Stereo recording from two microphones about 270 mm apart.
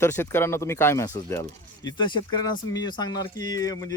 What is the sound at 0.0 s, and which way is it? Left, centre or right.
Speech, centre.